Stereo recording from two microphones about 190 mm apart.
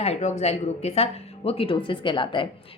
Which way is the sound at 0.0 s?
35° left (ahead or behind).